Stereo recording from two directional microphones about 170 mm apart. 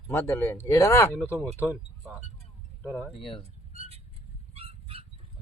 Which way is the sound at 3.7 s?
35° right (ahead or behind).